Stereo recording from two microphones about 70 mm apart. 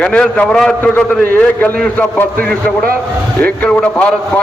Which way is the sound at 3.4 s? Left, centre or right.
Centre.